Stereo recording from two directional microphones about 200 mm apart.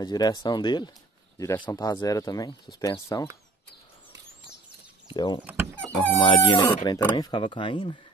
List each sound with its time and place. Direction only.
0.0 s speech: 20° left (ahead or behind)
5.1 s speech: 20° left (ahead or behind)